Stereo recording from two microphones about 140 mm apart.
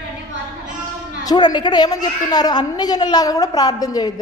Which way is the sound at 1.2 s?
30° left (ahead or behind).